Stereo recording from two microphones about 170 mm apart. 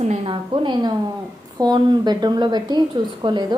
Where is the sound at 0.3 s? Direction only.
25° right (ahead or behind).